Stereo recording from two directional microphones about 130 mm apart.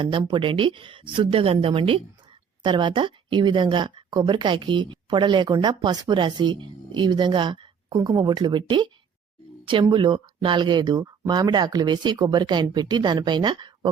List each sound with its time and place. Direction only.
0.0 s a woman's voice: 40° right (ahead or behind)
9.9 s a woman's voice: 40° right (ahead or behind)